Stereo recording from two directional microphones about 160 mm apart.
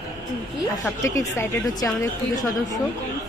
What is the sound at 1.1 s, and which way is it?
Speech, 20° left (ahead or behind).